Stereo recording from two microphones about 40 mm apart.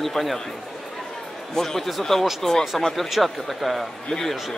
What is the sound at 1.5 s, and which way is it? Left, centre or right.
Speech, centre.